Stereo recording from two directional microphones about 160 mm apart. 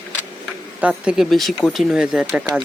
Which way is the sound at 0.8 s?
5° right (ahead or behind).